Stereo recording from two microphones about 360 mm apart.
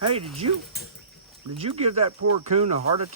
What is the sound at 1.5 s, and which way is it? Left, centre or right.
Speech, centre.